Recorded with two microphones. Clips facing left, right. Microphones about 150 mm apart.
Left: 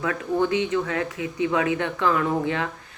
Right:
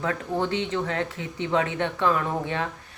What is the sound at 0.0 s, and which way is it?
Speech, 30° right (ahead or behind).